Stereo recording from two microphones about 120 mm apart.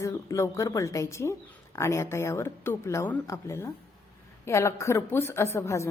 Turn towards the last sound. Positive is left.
turn(degrees=25)  # may be behind; listen again after turning